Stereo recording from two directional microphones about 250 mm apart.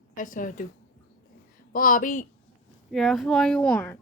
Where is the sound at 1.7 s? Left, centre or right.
Left.